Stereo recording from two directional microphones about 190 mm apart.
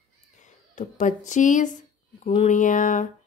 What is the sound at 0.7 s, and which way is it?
A woman's voice, 40° left (ahead or behind).